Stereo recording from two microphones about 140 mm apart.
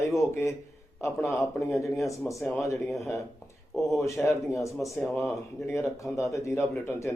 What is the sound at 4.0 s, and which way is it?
Speech, 20° left (ahead or behind).